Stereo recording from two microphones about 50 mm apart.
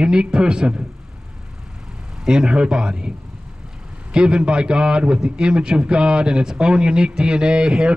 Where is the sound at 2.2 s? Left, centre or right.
Centre.